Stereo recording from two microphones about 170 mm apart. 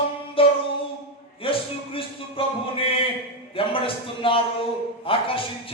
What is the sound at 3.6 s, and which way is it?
Speech, 35° left (ahead or behind).